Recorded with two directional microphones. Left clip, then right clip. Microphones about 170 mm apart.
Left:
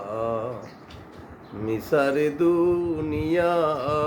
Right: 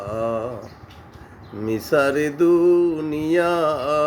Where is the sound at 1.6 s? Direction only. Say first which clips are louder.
Right 3 dB; 45° right (ahead or behind).